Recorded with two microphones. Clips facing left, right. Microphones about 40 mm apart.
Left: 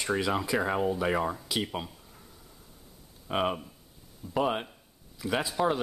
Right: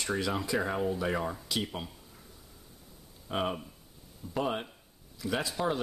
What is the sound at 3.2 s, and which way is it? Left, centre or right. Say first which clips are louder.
Speech: left 3 dB; left.